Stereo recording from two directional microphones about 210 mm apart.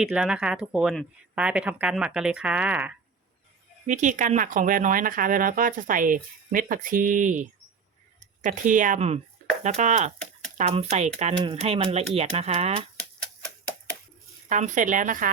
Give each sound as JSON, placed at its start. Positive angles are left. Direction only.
{"t": 0.0, "sound": "speech", "side_deg": -5}
{"t": 3.8, "sound": "speech", "side_deg": -35}
{"t": 14.5, "sound": "speech", "side_deg": -35}